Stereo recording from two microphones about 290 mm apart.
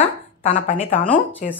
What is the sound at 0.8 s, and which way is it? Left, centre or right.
Speech, centre.